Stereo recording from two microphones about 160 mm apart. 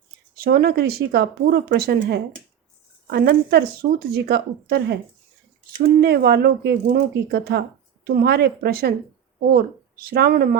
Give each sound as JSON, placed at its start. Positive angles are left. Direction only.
{"t": 0.3, "sound": "a woman's voice", "side_deg": -70}
{"t": 6.0, "sound": "a woman's voice", "side_deg": -75}